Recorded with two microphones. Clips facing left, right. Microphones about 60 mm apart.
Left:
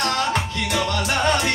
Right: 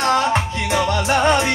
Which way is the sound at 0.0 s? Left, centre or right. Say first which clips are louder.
Right 5 dB; right.